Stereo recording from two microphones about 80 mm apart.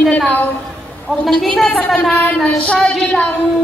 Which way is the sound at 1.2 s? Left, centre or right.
Centre.